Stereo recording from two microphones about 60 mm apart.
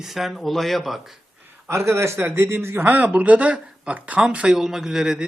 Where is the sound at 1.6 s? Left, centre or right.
Right.